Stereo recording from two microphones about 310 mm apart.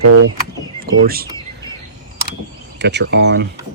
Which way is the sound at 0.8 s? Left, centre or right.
Right.